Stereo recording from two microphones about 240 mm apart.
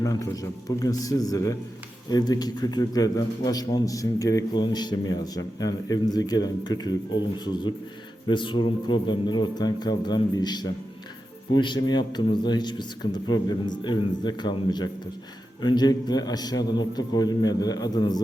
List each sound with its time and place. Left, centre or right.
0.0 s a man's voice: centre